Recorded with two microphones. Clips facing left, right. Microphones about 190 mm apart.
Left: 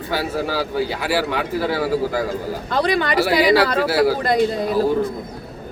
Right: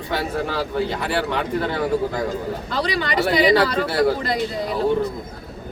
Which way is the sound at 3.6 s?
65° left (ahead or behind).